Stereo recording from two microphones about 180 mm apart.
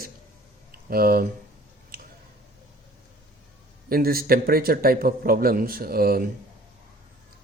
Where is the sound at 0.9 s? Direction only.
55° right (ahead or behind).